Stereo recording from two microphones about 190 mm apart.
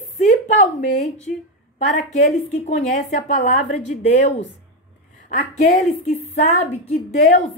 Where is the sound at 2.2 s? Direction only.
35° left (ahead or behind).